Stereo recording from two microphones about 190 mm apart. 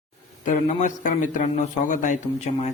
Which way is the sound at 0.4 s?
40° left (ahead or behind).